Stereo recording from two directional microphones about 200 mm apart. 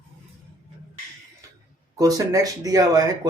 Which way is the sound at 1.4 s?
15° right (ahead or behind).